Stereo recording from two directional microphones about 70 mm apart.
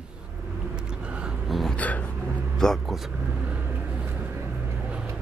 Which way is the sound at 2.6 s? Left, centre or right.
Centre.